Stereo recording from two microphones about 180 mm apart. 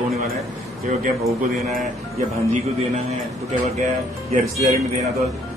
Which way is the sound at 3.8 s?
45° right (ahead or behind).